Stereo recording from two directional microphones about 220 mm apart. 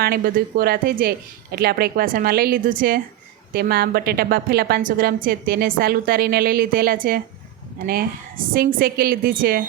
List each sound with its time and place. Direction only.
0.0 s a woman's voice: 40° right (ahead or behind)